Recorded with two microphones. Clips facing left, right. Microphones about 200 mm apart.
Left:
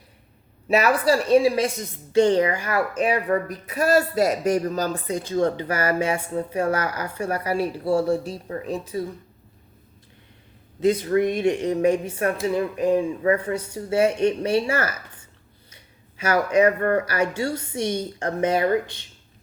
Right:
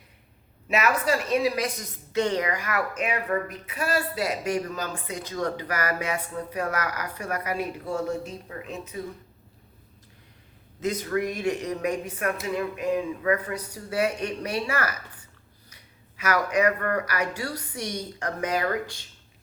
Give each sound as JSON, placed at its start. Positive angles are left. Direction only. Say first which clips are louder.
{"t": 0.7, "sound": "a woman's voice", "louder": "left 5 dB", "side_deg": 35}
{"t": 10.8, "sound": "speech", "louder": "left 7 dB", "side_deg": 30}